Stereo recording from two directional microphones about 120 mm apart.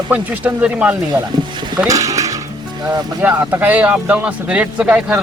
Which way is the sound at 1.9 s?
30° right (ahead or behind).